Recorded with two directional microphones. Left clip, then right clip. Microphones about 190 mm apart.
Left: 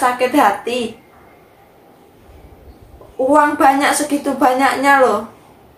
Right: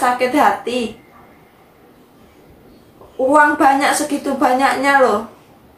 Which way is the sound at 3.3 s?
Centre (ahead or behind).